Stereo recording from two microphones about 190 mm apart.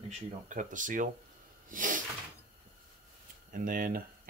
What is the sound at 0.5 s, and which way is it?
Speech, 45° right (ahead or behind).